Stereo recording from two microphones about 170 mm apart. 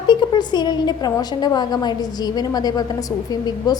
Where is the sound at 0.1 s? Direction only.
25° left (ahead or behind).